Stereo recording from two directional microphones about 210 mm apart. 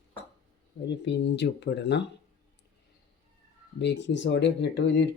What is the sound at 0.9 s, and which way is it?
Speech, 55° left (ahead or behind).